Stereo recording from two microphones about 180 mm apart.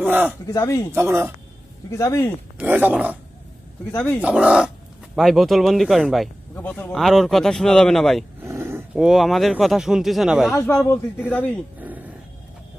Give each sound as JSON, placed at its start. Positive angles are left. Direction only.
{"t": 0.0, "sound": "speech", "side_deg": -10}
{"t": 0.5, "sound": "speech", "side_deg": 20}
{"t": 0.9, "sound": "dog", "side_deg": -10}
{"t": 1.9, "sound": "speech", "side_deg": 15}
{"t": 2.6, "sound": "dog", "side_deg": -10}
{"t": 3.9, "sound": "speech", "side_deg": 10}
{"t": 4.2, "sound": "speech", "side_deg": -5}
{"t": 8.5, "sound": "a sound", "side_deg": -15}
{"t": 9.0, "sound": "speech", "side_deg": 0}
{"t": 10.5, "sound": "speech", "side_deg": 15}